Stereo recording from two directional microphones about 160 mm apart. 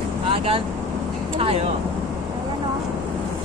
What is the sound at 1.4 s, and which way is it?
Vehicle, 40° right (ahead or behind).